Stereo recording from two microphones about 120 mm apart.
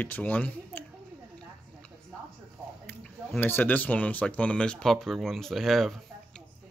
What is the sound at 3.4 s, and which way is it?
Speech, 15° left (ahead or behind).